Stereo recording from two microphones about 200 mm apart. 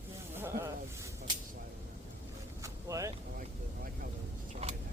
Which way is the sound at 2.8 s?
15° right (ahead or behind).